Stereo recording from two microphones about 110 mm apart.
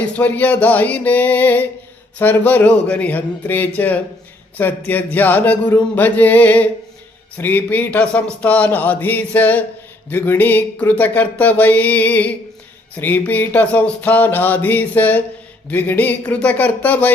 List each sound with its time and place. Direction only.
0.0 s speech: 15° left (ahead or behind)